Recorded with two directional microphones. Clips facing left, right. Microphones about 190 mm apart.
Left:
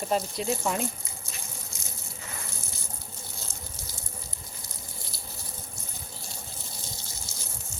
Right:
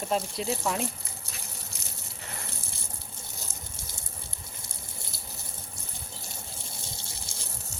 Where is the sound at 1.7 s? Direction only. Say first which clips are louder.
Left 1 dB; 65° right (ahead or behind).